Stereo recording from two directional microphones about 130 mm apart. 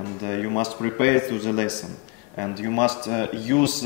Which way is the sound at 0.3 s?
15° left (ahead or behind).